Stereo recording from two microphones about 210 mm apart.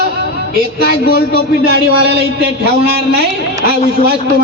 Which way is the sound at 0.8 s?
45° left (ahead or behind).